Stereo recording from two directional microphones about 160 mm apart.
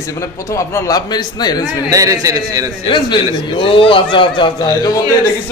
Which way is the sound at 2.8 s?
30° left (ahead or behind).